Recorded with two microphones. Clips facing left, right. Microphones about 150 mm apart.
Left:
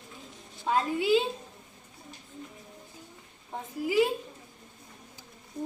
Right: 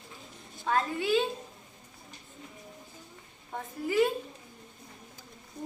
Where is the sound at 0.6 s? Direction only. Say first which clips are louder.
Left 2 dB; 20° left (ahead or behind).